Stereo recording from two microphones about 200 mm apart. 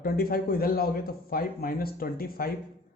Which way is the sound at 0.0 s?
50° left (ahead or behind).